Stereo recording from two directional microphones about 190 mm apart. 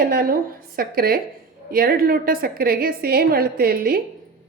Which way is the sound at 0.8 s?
50° right (ahead or behind).